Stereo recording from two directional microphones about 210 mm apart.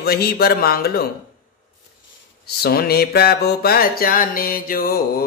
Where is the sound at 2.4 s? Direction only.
50° left (ahead or behind).